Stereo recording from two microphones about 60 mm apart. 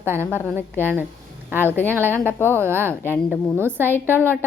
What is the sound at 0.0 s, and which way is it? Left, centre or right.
Speech, right.